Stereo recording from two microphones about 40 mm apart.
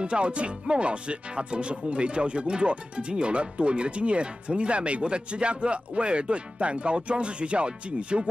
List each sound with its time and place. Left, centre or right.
0.0 s speech: right